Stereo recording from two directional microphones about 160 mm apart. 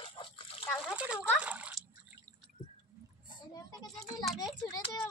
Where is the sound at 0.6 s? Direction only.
5° right (ahead or behind).